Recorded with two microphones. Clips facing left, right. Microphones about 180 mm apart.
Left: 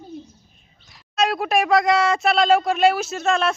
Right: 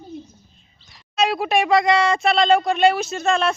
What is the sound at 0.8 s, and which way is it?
Speech, centre (ahead or behind).